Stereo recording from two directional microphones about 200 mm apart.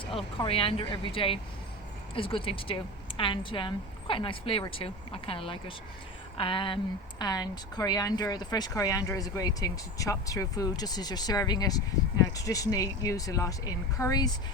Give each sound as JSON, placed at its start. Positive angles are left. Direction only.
{"t": 0.0, "sound": "speech", "side_deg": 25}